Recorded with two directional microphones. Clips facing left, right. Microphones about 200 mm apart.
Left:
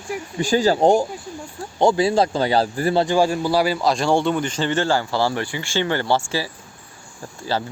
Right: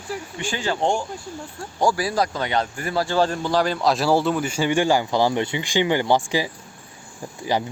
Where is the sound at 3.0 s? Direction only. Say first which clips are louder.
Right 1 dB; 15° left (ahead or behind); by 7.6 s 15° right (ahead or behind).